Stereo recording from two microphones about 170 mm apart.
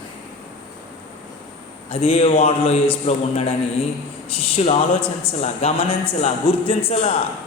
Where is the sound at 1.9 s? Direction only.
35° left (ahead or behind).